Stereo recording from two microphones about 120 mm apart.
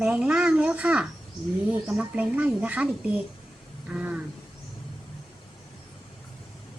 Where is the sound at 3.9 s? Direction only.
10° right (ahead or behind).